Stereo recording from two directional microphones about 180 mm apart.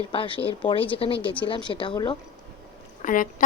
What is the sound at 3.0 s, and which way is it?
Speech, 50° left (ahead or behind).